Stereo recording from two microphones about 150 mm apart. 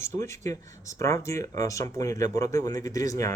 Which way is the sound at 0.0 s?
20° left (ahead or behind).